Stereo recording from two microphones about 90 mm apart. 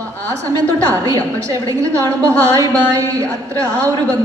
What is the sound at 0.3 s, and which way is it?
A woman's voice, 40° right (ahead or behind).